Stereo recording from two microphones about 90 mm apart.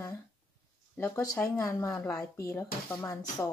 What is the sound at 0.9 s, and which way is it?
Speech, 25° left (ahead or behind).